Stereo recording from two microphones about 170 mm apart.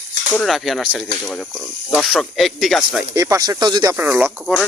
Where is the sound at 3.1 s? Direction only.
20° right (ahead or behind).